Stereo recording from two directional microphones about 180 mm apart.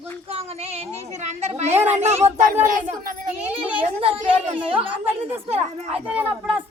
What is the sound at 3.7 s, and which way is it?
Speech, 30° right (ahead or behind).